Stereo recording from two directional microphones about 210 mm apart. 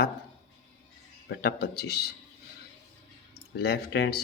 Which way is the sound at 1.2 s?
50° left (ahead or behind).